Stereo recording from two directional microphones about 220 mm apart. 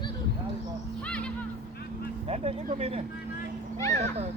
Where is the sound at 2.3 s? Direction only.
25° right (ahead or behind).